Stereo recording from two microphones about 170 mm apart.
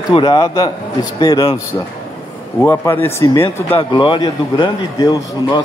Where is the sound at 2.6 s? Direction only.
15° left (ahead or behind).